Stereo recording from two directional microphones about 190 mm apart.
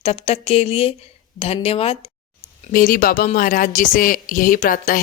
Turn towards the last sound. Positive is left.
turn(degrees=45)  # may be behind; listen again after turning